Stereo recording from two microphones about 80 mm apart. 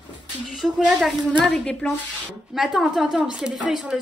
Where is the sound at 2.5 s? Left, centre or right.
Centre.